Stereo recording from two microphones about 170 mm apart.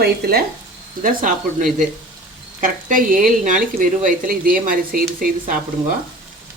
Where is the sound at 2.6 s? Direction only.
55° right (ahead or behind).